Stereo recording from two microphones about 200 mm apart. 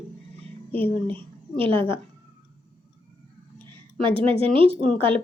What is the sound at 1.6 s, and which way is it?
Speech, 25° right (ahead or behind).